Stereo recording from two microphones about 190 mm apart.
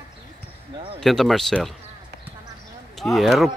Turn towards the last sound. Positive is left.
turn(degrees=0)  # may be behind; listen again after turning